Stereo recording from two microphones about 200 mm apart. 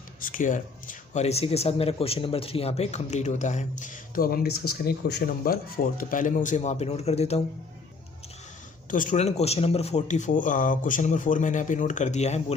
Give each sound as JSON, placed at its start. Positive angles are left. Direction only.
{"t": 0.2, "sound": "speech", "side_deg": 40}
{"t": 8.9, "sound": "speech", "side_deg": 40}